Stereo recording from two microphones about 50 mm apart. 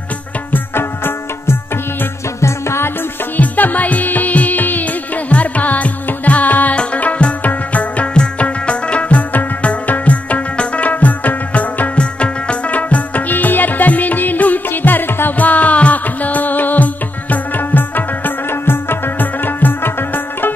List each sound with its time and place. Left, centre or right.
0.5 s music: left
2.4 s music: left
3.3 s music: left
15.3 s music: left